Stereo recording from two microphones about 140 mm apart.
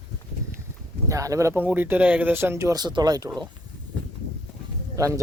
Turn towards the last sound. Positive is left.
turn(degrees=-20)  # may be behind; listen again after turning